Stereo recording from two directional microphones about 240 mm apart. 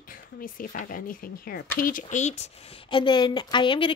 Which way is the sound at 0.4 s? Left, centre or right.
Left.